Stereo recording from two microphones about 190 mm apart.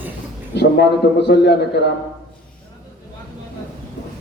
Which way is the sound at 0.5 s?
60° left (ahead or behind).